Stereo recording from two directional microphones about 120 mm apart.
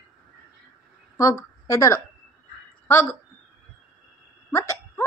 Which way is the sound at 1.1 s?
30° left (ahead or behind).